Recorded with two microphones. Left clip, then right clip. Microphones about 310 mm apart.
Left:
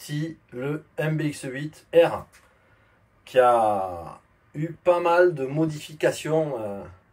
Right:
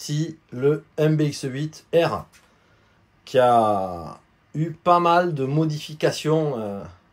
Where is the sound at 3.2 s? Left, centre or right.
Centre.